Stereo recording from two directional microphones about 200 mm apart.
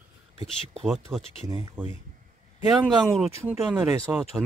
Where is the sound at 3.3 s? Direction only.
15° right (ahead or behind).